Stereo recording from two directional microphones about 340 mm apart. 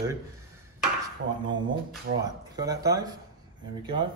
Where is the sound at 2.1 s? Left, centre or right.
Right.